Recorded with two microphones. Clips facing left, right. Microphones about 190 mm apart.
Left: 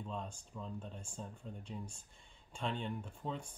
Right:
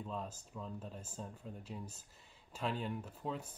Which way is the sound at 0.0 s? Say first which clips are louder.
Right 1 dB; 5° right (ahead or behind).